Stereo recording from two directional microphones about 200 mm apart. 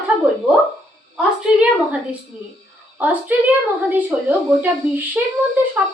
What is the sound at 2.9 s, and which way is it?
A woman's voice, 10° right (ahead or behind).